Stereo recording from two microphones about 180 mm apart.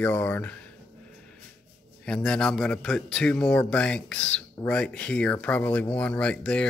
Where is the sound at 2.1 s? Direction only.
5° left (ahead or behind).